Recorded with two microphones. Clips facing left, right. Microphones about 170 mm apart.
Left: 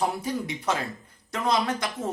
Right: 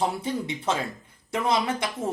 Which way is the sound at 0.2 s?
25° right (ahead or behind).